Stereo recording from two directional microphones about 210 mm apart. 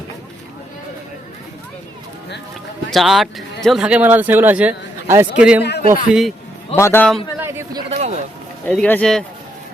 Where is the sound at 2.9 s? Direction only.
Centre (ahead or behind).